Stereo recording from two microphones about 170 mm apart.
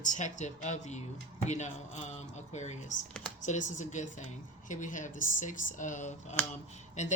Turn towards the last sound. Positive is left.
turn(degrees=45)  # may be behind; listen again after turning